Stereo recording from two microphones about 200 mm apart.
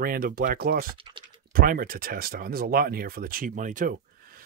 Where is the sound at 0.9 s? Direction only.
25° right (ahead or behind).